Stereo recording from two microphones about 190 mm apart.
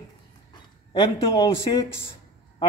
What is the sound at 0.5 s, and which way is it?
Speech, 25° left (ahead or behind).